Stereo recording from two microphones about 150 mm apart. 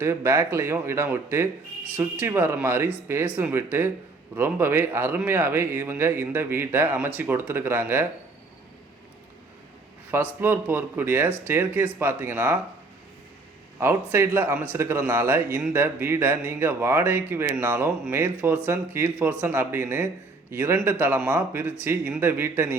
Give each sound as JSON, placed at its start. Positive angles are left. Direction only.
{"t": 0.0, "sound": "a man's voice", "side_deg": -20}
{"t": 10.4, "sound": "a man's voice", "side_deg": -15}
{"t": 13.7, "sound": "a man's voice", "side_deg": -15}